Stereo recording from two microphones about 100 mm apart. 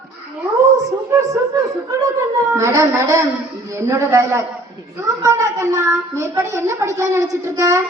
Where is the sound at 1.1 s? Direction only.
30° right (ahead or behind).